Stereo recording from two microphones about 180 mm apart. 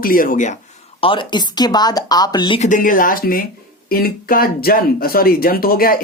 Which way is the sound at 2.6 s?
45° left (ahead or behind).